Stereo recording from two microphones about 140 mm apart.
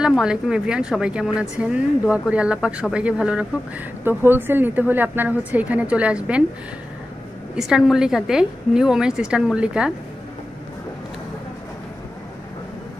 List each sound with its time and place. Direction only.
0.0 s speech: 5° right (ahead or behind)
7.5 s a woman's voice: 5° right (ahead or behind)